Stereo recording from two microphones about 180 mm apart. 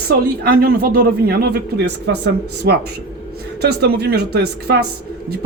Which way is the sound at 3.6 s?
65° right (ahead or behind).